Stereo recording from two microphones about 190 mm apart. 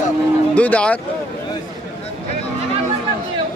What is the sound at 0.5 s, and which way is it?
Speech, 5° left (ahead or behind).